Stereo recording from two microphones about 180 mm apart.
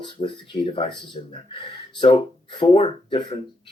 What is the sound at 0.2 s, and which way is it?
Speech, 30° left (ahead or behind).